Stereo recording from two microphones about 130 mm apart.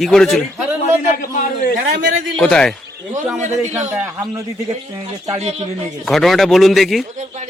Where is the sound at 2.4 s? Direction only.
5° left (ahead or behind).